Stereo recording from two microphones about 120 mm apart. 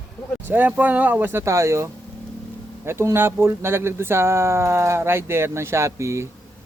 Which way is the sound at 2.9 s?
20° right (ahead or behind).